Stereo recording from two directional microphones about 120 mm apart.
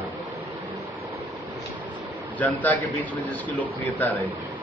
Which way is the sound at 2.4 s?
15° left (ahead or behind).